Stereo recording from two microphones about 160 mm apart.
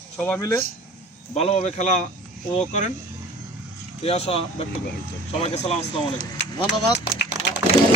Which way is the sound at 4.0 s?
40° left (ahead or behind).